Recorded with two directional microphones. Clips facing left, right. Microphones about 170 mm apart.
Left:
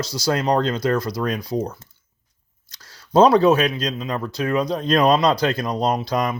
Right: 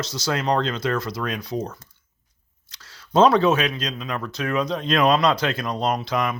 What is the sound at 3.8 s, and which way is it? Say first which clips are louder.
Speech: left 4 dB; 35° left (ahead or behind).